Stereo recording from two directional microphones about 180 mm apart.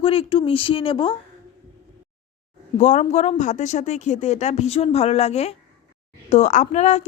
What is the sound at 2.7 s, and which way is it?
Speech, 40° left (ahead or behind).